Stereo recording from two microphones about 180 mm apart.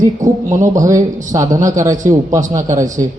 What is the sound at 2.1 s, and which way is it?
Speech, 35° right (ahead or behind).